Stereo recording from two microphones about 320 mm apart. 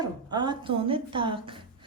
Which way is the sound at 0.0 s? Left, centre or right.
Centre.